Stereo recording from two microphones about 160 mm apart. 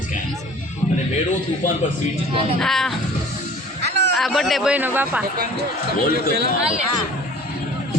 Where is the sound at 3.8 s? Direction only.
90° right.